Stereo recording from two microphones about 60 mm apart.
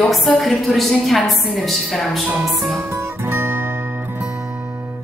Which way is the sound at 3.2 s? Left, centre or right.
Right.